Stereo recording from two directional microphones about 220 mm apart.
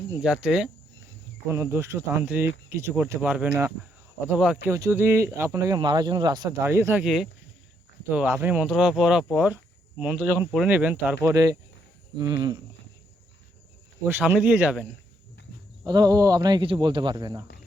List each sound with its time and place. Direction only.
0.4 s speech: 5° right (ahead or behind); by 12.6 s 20° right (ahead or behind)
14.0 s speech: 10° right (ahead or behind)
15.8 s speech: 15° right (ahead or behind)